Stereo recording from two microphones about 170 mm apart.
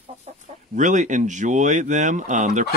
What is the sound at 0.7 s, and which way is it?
Speech, 45° right (ahead or behind).